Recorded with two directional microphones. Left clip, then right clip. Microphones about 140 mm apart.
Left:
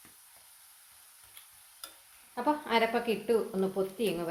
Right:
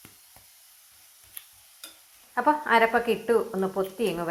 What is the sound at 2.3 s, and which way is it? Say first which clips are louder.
Speech: right 7 dB; 5° right (ahead or behind).